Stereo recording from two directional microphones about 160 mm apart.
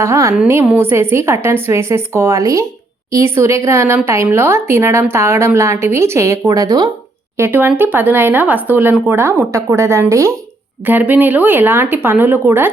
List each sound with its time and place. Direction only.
0.0 s a woman's voice: 20° right (ahead or behind)
7.3 s a woman's voice: 15° right (ahead or behind)